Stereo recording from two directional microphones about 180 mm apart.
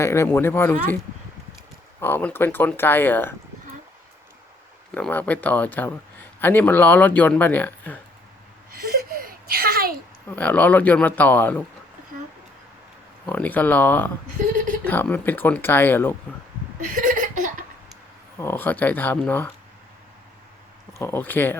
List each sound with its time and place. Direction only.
0.0 s speech: 15° left (ahead or behind)
2.0 s speech: 10° left (ahead or behind)
4.9 s speech: 10° left (ahead or behind)
8.7 s a sound: 55° right (ahead or behind)
10.2 s speech: 10° left (ahead or behind)
13.2 s speech: 10° left (ahead or behind)
16.9 s a sound: 45° right (ahead or behind)
18.3 s speech: 10° left (ahead or behind)
21.0 s speech: 10° left (ahead or behind)